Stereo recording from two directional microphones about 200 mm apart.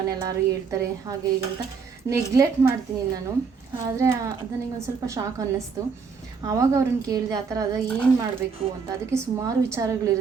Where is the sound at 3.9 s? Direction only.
15° right (ahead or behind).